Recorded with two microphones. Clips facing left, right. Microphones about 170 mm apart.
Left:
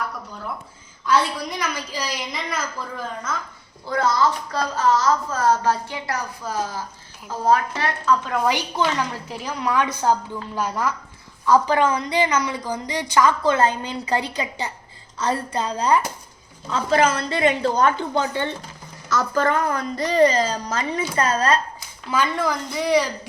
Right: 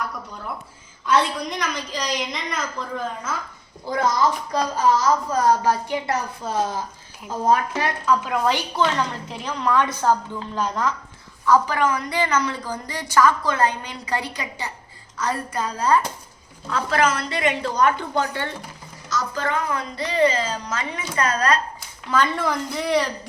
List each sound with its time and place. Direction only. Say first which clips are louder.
1.0 s a woman's voice: even; centre (ahead or behind)
3.8 s a woman's voice: even; 15° right (ahead or behind)
8.4 s a woman's voice: right 1 dB; 15° left (ahead or behind)
19.1 s a woman's voice: left 4 dB; 50° left (ahead or behind); by 21.6 s 30° left (ahead or behind)
22.1 s a woman's voice: even; 5° left (ahead or behind)